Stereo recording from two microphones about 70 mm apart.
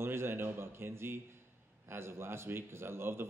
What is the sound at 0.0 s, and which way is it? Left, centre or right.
Speech, right.